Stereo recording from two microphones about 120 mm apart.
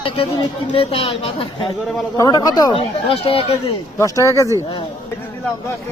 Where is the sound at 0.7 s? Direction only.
50° left (ahead or behind).